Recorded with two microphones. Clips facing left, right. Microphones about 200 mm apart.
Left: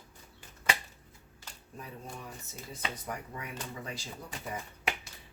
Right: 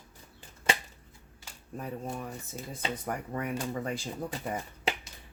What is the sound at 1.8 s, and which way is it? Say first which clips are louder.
Speech: right 8 dB; 50° right (ahead or behind).